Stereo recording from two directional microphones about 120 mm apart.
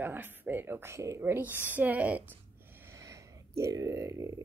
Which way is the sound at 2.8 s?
25° right (ahead or behind).